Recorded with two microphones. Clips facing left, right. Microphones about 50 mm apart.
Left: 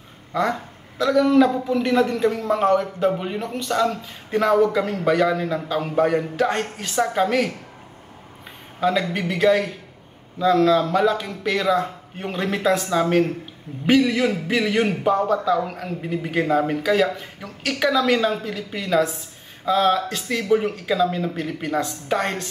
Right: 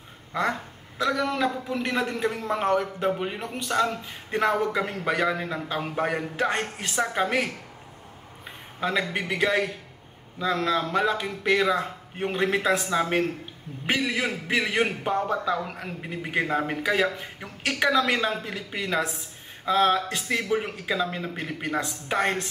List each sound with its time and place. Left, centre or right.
0.3 s a man's voice: centre
8.8 s a man's voice: centre